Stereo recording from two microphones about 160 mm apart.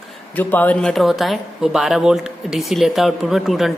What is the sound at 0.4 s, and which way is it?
Speech, 10° left (ahead or behind).